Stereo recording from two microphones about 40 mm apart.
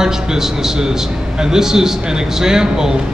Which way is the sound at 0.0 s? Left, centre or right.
Centre.